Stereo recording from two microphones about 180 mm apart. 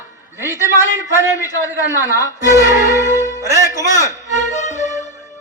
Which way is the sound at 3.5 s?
15° right (ahead or behind).